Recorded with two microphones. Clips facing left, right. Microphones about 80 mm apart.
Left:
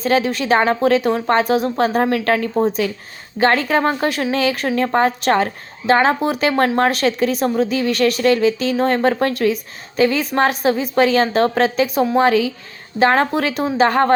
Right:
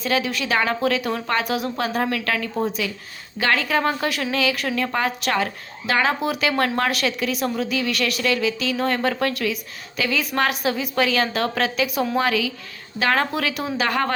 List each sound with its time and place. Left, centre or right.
0.0 s speech: left